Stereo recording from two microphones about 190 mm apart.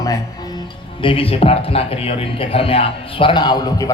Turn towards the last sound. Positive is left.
turn(degrees=20)  # may be behind; listen again after turning